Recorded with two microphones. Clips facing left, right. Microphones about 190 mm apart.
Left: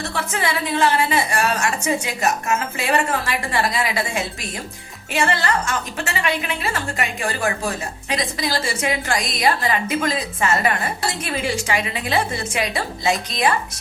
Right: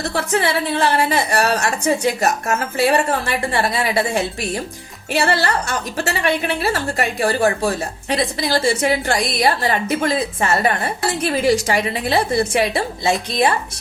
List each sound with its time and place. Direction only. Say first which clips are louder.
0.0 s a woman's voice: right 5 dB; 40° right (ahead or behind)